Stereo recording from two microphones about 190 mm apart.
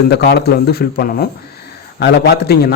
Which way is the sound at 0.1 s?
60° left (ahead or behind).